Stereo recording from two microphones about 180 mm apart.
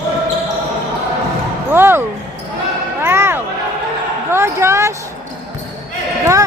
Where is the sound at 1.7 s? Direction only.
10° right (ahead or behind).